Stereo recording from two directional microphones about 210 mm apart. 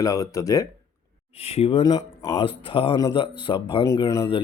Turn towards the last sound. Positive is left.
turn(degrees=20)  # may be behind; listen again after turning